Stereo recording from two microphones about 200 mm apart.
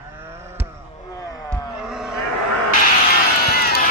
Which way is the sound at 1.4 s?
Centre (ahead or behind).